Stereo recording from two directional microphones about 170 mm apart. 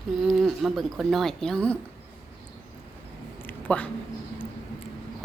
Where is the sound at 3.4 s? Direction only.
10° left (ahead or behind).